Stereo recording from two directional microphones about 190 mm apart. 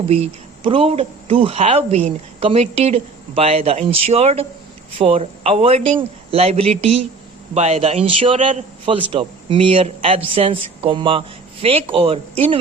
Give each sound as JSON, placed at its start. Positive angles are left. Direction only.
{"t": 0.1, "sound": "a man's voice", "side_deg": -30}